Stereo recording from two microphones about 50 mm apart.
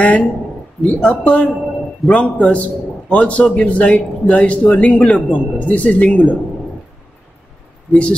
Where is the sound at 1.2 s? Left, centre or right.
Left.